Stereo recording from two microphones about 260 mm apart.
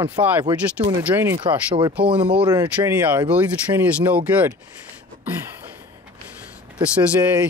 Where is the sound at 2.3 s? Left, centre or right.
Centre.